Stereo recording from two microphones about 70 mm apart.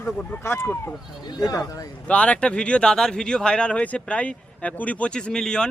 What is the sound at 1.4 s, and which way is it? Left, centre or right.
Speech, left.